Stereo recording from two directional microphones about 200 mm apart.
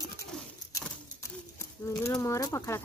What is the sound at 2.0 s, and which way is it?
Speech, 15° left (ahead or behind).